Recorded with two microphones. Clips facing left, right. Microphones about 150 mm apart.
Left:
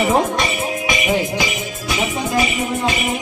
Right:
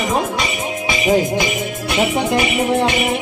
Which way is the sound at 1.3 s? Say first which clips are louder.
Right 3 dB; 55° right (ahead or behind).